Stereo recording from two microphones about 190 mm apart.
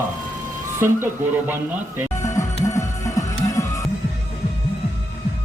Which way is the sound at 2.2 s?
15° left (ahead or behind).